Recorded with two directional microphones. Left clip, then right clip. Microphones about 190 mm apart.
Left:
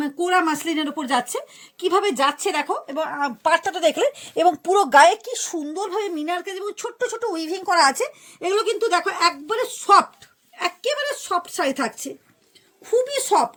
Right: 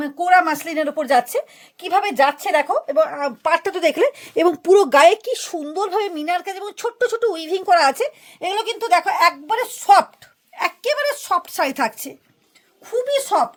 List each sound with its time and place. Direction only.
0.0 s a woman's voice: 30° right (ahead or behind); by 7.1 s 60° right (ahead or behind)
7.2 s a woman's voice: 40° right (ahead or behind)
8.4 s a woman's voice: 60° right (ahead or behind)
13.1 s speech: 25° right (ahead or behind)